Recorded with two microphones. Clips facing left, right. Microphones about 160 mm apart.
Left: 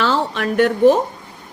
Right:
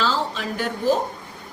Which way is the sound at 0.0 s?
65° left (ahead or behind).